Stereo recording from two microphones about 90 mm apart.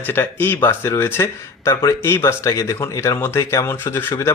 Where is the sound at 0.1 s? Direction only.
25° left (ahead or behind).